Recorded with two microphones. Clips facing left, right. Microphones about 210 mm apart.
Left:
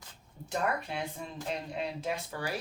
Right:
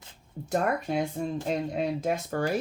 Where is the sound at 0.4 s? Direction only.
45° right (ahead or behind).